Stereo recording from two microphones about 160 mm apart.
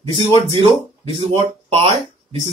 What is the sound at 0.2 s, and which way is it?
Speech, 40° right (ahead or behind).